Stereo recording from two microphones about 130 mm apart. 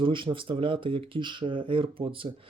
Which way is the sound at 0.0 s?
40° right (ahead or behind).